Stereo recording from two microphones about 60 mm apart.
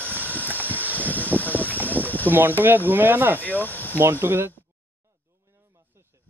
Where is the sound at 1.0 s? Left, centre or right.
Left.